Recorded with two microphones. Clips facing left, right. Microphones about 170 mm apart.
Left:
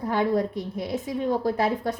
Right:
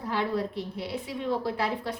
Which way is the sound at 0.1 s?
45° left (ahead or behind).